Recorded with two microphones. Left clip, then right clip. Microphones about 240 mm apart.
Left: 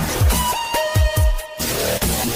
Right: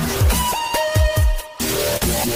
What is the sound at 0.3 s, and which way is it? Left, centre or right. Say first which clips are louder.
Music: even; centre.